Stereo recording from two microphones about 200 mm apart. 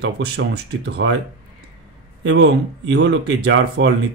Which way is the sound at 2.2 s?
60° right (ahead or behind).